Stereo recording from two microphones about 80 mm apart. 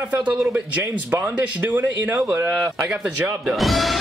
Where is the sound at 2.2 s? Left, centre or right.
Right.